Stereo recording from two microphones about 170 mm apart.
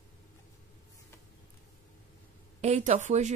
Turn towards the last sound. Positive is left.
turn(degrees=-45)  # may be behind; listen again after turning